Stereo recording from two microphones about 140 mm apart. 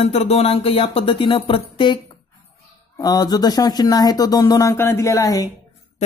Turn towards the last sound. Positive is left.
turn(degrees=25)  # may be behind; listen again after turning